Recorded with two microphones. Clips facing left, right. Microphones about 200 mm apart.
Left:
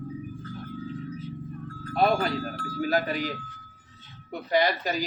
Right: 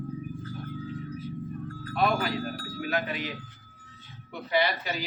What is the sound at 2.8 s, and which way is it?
Speech, 40° left (ahead or behind).